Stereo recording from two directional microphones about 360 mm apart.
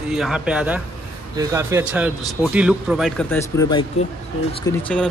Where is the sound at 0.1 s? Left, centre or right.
Centre.